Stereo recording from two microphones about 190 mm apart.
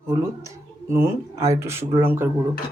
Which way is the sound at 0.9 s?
15° right (ahead or behind).